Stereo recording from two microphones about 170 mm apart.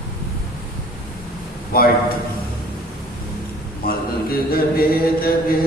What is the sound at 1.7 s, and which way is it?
Speech, 60° left (ahead or behind).